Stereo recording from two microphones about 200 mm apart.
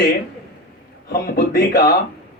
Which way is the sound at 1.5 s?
50° left (ahead or behind).